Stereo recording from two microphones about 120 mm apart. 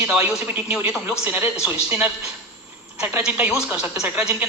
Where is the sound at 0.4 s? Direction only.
15° right (ahead or behind).